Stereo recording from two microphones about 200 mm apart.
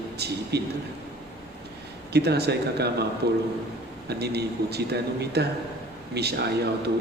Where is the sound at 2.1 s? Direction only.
55° right (ahead or behind).